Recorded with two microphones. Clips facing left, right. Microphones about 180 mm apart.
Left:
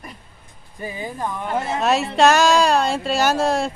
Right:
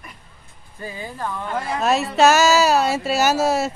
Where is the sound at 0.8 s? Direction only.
15° left (ahead or behind).